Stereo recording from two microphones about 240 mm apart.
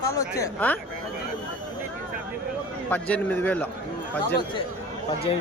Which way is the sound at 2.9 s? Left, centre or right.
Centre.